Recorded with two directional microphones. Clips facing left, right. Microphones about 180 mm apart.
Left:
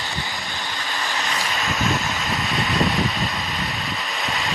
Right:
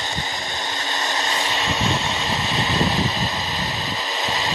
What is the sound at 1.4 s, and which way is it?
Vehicle, 30° right (ahead or behind).